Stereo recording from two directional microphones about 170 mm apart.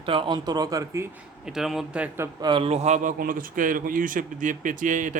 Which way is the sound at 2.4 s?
30° right (ahead or behind).